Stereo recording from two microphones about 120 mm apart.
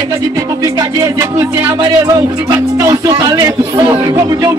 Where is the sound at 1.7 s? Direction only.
30° right (ahead or behind).